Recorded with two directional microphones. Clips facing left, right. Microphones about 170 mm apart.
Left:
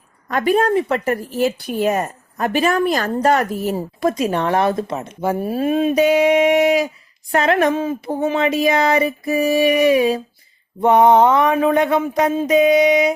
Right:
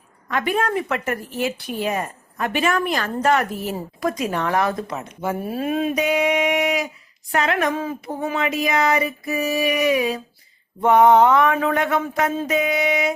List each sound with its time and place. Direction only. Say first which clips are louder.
0.3 s a woman's voice: left 6 dB; 35° left (ahead or behind)
4.2 s a woman's voice: left 3 dB; 25° left (ahead or behind)
10.8 s a sound: left 2 dB; 20° left (ahead or behind)